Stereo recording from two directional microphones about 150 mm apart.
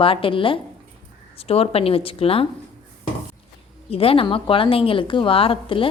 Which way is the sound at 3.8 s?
40° left (ahead or behind).